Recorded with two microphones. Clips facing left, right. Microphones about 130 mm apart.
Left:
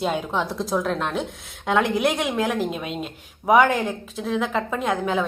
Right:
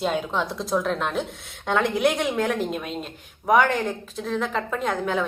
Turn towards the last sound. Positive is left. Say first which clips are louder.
# left 2 dB
turn(degrees=5)  # may be behind; listen again after turning